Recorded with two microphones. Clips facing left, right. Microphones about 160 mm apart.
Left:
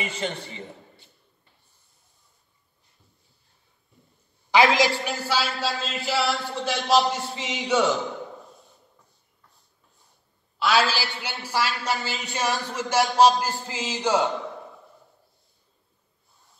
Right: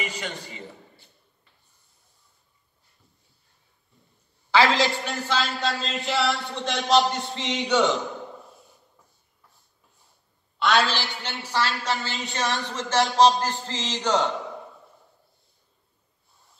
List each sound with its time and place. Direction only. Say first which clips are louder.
0.0 s a man's voice: left 3 dB; 25° left (ahead or behind)
4.5 s a man's voice: left 1 dB; 15° left (ahead or behind)
5.1 s speech: even; 5° left (ahead or behind)
10.6 s a man's voice: even; 5° left (ahead or behind)